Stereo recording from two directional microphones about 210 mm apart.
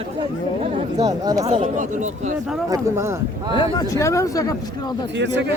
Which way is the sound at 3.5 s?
25° left (ahead or behind).